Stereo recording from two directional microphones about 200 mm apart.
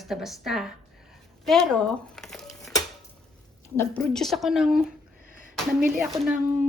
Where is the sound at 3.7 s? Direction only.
5° left (ahead or behind).